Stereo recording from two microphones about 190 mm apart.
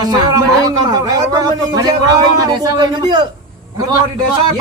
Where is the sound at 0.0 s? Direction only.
20° right (ahead or behind).